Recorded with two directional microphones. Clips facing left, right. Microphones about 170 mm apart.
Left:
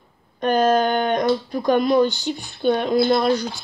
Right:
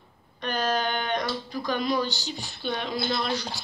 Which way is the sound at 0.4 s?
45° left (ahead or behind).